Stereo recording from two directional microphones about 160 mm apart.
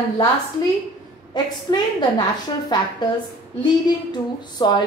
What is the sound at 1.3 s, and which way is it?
A woman's voice, 25° left (ahead or behind).